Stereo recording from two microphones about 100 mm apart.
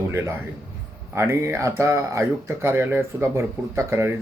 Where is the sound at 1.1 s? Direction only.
25° right (ahead or behind).